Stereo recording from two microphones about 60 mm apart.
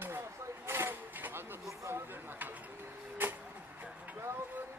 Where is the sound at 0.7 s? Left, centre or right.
Right.